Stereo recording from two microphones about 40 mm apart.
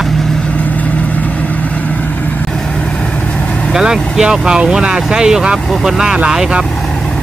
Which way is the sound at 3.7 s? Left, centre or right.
Centre.